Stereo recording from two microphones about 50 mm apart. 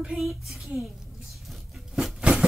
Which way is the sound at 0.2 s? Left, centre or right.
Centre.